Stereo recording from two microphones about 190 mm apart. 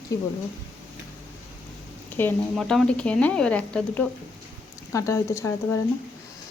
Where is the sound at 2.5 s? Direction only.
Centre (ahead or behind).